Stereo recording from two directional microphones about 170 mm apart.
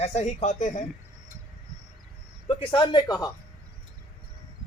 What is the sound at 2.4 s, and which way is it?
Speech, 30° left (ahead or behind).